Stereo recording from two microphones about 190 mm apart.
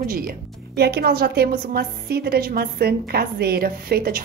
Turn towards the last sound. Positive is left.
turn(degrees=-50)  # may be behind; listen again after turning